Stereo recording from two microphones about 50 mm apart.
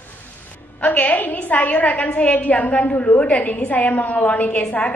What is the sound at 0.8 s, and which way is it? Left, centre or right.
A woman's voice, left.